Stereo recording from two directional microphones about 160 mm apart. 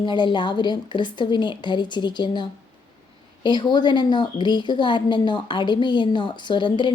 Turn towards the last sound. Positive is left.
turn(degrees=30)  # may be behind; listen again after turning